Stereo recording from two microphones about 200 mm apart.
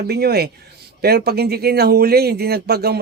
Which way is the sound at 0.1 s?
55° right (ahead or behind).